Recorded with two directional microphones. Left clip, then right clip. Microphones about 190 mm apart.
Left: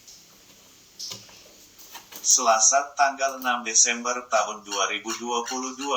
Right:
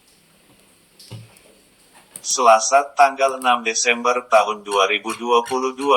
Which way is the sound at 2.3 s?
20° right (ahead or behind).